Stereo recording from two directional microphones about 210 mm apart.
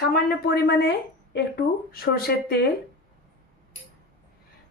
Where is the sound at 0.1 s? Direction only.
45° left (ahead or behind).